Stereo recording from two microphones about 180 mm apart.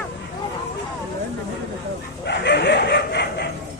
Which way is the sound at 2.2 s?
70° left (ahead or behind).